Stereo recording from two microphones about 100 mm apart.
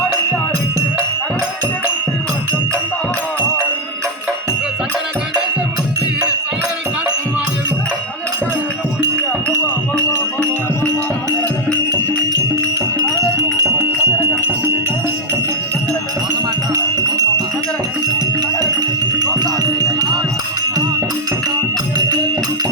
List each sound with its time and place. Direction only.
14.0 s music: 25° left (ahead or behind)
16.7 s music: 35° right (ahead or behind)
18.6 s music: 40° right (ahead or behind)